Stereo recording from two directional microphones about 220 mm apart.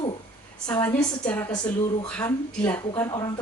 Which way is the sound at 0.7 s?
10° left (ahead or behind).